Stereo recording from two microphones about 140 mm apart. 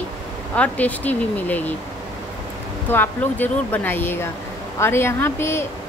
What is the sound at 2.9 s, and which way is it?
Speech, 15° left (ahead or behind).